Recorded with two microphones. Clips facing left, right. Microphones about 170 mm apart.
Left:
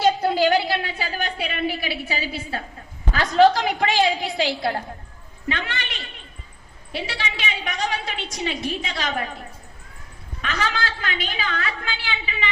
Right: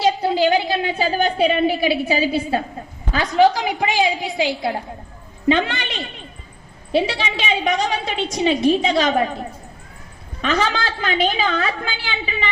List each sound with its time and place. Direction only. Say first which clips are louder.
0.0 s a sound: right 2 dB; 15° right (ahead or behind)
3.2 s a woman's voice: right 1 dB; 15° right (ahead or behind)
10.4 s a woman's voice: right 6 dB; 25° right (ahead or behind)